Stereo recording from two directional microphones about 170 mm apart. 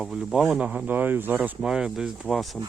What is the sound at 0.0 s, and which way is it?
Speech, 5° right (ahead or behind).